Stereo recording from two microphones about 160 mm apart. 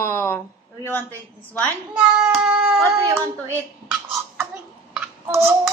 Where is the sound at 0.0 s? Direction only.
15° left (ahead or behind).